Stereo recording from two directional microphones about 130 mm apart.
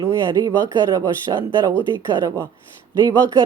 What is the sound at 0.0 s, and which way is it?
A woman's voice, 25° right (ahead or behind).